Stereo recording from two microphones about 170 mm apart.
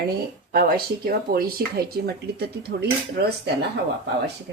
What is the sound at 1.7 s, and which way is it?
Cutlery, 65° right (ahead or behind).